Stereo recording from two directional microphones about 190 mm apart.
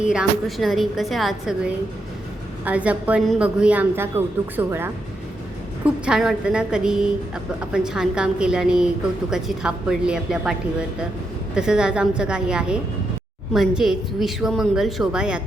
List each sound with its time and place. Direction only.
0.1 s a woman's voice: centre (ahead or behind)